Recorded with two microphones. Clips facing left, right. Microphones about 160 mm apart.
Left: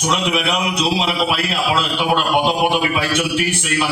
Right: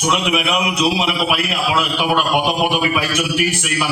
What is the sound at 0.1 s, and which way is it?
A man's voice, 35° left (ahead or behind).